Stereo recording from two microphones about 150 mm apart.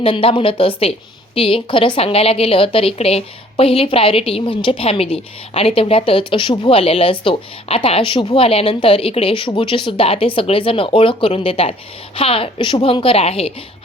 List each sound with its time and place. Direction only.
0.0 s a woman's voice: 40° left (ahead or behind)